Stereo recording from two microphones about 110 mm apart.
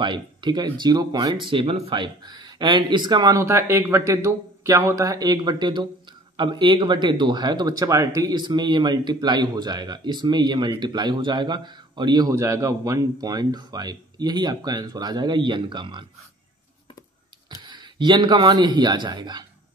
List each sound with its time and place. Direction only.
0.0 s speech: 45° right (ahead or behind)
3.3 s speech: 25° right (ahead or behind)
12.4 s speech: 25° right (ahead or behind); by 16.1 s 45° right (ahead or behind)
17.5 s a man's voice: 45° right (ahead or behind)